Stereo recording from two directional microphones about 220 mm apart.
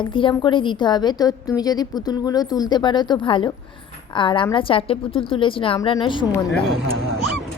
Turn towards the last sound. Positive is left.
turn(degrees=0)  # may be behind; listen again after turning